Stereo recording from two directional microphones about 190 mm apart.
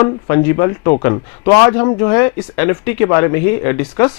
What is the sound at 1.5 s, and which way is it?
Speech, 20° left (ahead or behind).